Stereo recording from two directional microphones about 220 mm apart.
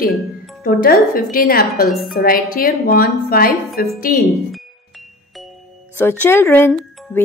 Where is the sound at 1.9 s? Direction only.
Centre (ahead or behind).